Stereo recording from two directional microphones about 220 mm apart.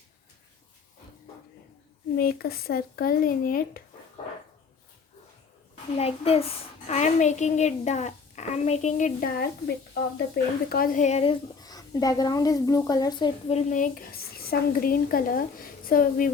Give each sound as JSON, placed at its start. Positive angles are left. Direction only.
{"t": 2.1, "sound": "speech", "side_deg": 45}
{"t": 6.0, "sound": "speech", "side_deg": 25}